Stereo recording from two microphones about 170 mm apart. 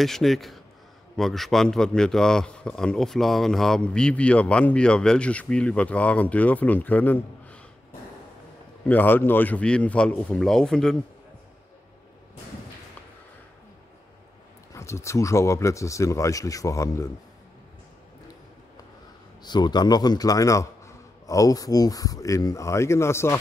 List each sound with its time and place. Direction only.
0.0 s speech: centre (ahead or behind)
8.8 s speech: 10° left (ahead or behind)
14.7 s speech: 15° left (ahead or behind)
19.4 s a man's voice: 25° left (ahead or behind)